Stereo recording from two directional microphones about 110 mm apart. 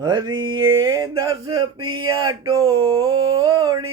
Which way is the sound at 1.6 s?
45° right (ahead or behind).